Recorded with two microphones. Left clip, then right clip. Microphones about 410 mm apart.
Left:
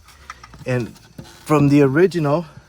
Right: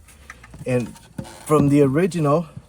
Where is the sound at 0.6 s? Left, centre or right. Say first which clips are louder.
Right 1 dB; left.